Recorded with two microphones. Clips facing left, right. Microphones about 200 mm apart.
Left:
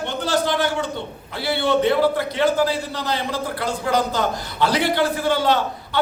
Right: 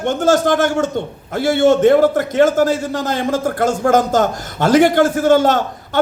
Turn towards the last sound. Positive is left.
turn(degrees=-45)  # may be behind; listen again after turning